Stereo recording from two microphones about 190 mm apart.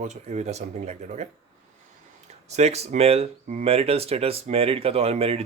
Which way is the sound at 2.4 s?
35° right (ahead or behind).